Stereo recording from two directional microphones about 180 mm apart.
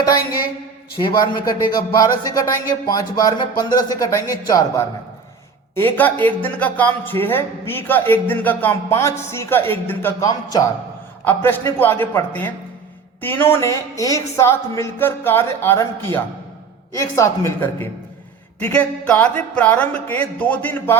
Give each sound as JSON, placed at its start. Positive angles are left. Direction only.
{"t": 1.7, "sound": "a man's voice", "side_deg": 20}